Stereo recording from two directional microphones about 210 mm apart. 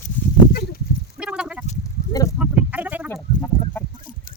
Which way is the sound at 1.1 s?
5° right (ahead or behind).